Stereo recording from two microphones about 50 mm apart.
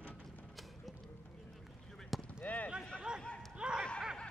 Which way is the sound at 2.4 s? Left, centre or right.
Left.